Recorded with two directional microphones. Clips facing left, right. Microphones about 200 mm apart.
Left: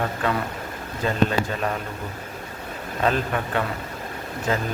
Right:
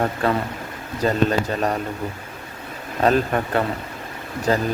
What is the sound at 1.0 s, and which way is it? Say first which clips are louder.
Speech: right 3 dB; 40° right (ahead or behind).